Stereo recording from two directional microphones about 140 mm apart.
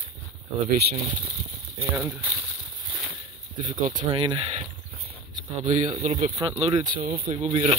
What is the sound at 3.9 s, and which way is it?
Speech, 35° right (ahead or behind).